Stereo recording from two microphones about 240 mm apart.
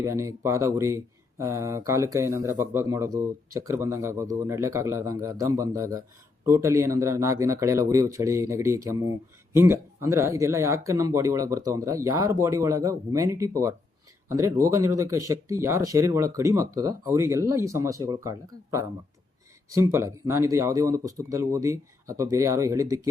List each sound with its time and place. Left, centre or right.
0.0 s speech: centre